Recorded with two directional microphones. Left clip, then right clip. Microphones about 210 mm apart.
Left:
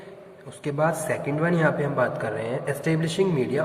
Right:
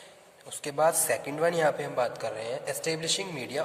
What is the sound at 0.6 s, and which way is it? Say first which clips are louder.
A man's voice: left 1 dB; 45° right (ahead or behind).